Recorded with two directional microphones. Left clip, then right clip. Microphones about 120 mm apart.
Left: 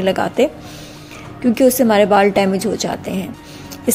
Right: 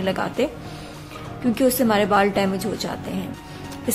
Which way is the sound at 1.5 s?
40° left (ahead or behind).